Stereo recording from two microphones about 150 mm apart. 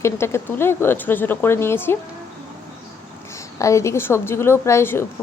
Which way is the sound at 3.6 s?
20° left (ahead or behind).